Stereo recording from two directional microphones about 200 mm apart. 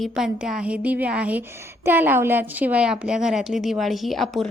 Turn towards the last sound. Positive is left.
turn(degrees=0)  # may be behind; listen again after turning